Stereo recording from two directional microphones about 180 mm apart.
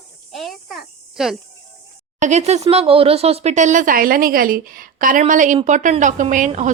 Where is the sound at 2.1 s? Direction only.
40° right (ahead or behind).